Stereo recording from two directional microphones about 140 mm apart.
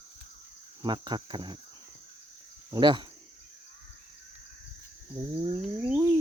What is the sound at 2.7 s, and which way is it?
Speech, 35° right (ahead or behind).